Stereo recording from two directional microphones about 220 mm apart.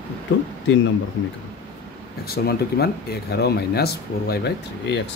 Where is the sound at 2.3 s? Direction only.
45° left (ahead or behind).